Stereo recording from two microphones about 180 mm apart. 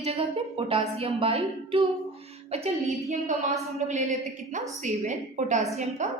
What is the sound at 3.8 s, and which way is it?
A woman's voice, 40° right (ahead or behind).